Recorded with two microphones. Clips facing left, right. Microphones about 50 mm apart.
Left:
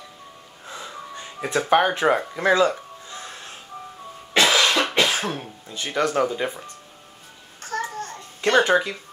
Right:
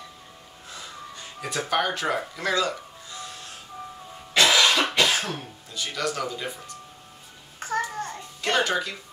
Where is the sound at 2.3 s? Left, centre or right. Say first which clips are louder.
Left 7 dB; left.